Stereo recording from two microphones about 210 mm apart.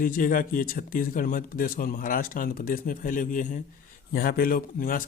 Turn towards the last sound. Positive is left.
turn(degrees=40)  # may be behind; listen again after turning